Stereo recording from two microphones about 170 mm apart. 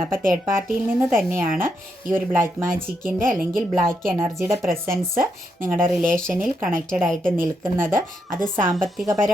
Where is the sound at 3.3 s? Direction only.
Centre (ahead or behind).